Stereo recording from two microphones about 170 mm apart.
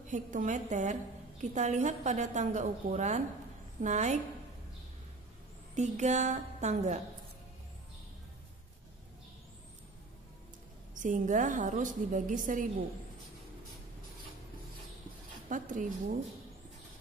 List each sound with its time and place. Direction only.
0.0 s a woman's voice: 45° right (ahead or behind)
5.8 s a woman's voice: 45° right (ahead or behind)
11.0 s a woman's voice: 50° right (ahead or behind)
15.4 s speech: 50° right (ahead or behind)